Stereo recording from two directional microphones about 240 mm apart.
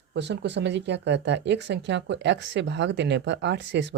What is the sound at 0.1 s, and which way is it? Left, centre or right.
Speech, right.